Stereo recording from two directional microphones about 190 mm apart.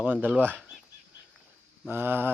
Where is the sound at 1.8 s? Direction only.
10° right (ahead or behind).